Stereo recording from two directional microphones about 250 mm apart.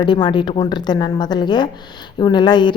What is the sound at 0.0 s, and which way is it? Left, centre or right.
A woman's voice, centre.